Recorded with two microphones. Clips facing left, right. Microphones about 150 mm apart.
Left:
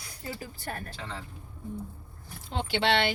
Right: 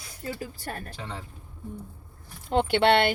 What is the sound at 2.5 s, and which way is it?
Speech, 55° right (ahead or behind).